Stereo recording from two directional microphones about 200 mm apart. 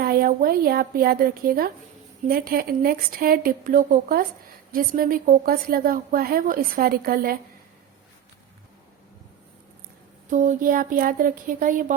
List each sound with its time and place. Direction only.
0.0 s a woman's voice: 50° right (ahead or behind)
10.2 s a woman's voice: 40° right (ahead or behind)